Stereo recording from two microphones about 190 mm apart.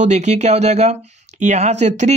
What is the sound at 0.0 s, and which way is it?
Speech, 35° right (ahead or behind).